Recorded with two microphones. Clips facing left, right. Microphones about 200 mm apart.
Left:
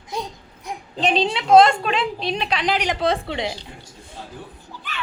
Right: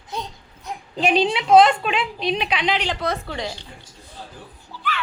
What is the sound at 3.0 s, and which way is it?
Speech, 30° left (ahead or behind).